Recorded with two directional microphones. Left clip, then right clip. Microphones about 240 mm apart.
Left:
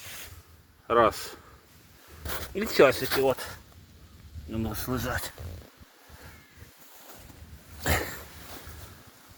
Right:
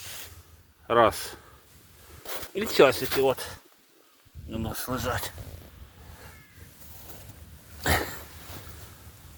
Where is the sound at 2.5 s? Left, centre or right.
Centre.